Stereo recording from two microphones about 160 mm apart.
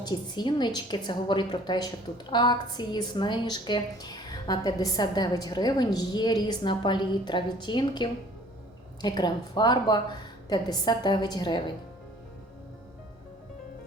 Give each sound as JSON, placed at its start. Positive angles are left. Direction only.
{"t": 0.0, "sound": "a woman's voice", "side_deg": 30}